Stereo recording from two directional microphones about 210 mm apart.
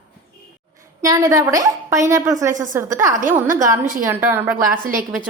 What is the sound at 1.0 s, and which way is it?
A woman's voice, 15° right (ahead or behind).